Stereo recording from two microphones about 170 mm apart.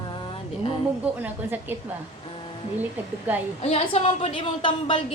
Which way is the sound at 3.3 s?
10° right (ahead or behind).